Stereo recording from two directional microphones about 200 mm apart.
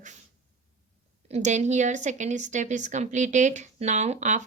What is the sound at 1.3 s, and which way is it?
Speech, 35° right (ahead or behind).